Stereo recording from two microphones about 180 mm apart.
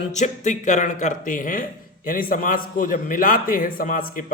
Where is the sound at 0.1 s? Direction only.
40° left (ahead or behind).